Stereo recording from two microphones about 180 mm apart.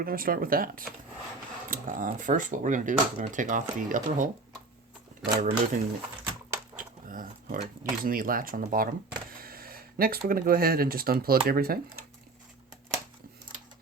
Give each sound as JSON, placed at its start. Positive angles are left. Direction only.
{"t": 0.0, "sound": "speech", "side_deg": -55}
{"t": 6.7, "sound": "dog", "side_deg": -50}
{"t": 8.0, "sound": "speech", "side_deg": -50}